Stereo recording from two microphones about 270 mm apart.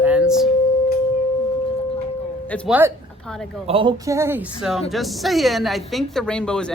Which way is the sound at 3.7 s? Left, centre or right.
Centre.